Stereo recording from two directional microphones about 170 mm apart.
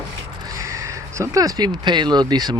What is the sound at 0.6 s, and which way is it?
Speech, 20° right (ahead or behind).